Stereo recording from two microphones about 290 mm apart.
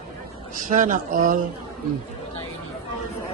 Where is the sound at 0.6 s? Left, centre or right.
Right.